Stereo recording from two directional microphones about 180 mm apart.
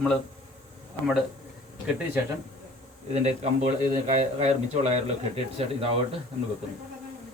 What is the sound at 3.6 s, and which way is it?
Speech, 40° right (ahead or behind).